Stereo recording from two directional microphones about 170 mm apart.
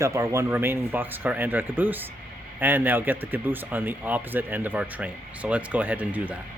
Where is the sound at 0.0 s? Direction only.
15° right (ahead or behind).